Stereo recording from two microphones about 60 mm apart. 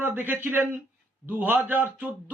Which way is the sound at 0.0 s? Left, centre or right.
Right.